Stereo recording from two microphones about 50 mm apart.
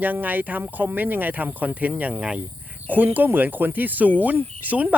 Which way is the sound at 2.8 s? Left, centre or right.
Right.